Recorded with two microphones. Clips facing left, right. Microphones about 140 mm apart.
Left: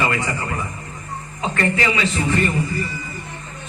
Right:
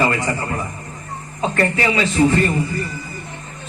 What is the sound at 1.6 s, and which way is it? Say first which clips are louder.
Speech: right 2 dB; 35° right (ahead or behind).